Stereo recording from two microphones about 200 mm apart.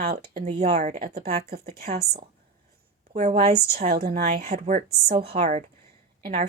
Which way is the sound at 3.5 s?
50° right (ahead or behind).